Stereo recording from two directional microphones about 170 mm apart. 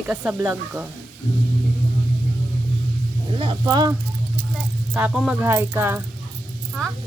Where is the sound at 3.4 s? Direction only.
25° right (ahead or behind).